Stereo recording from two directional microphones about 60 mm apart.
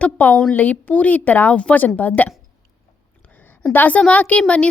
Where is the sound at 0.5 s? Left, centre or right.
Left.